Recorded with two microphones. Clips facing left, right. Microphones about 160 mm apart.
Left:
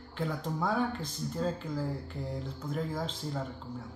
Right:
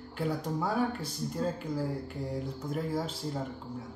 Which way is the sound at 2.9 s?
10° right (ahead or behind).